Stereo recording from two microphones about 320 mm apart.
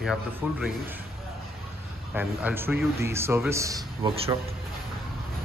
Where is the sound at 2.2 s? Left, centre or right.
Centre.